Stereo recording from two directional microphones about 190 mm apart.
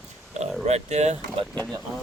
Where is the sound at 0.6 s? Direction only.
35° right (ahead or behind).